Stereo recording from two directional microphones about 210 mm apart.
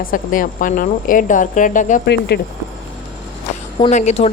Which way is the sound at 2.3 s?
50° left (ahead or behind).